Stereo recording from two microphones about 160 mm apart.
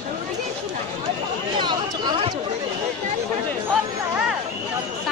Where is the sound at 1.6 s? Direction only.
30° right (ahead or behind).